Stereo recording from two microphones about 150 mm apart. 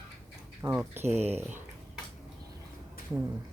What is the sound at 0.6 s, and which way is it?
Speech, 15° right (ahead or behind).